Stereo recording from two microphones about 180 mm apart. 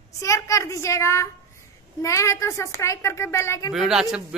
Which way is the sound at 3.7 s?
5° right (ahead or behind).